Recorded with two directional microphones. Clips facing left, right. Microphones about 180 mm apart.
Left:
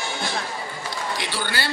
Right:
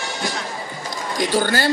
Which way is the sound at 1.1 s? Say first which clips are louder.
Right 13 dB; 45° right (ahead or behind).